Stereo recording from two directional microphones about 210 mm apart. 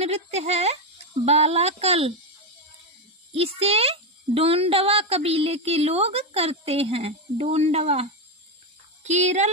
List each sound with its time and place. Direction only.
0.0 s speech: 30° right (ahead or behind)
3.3 s a child's voice: 30° right (ahead or behind)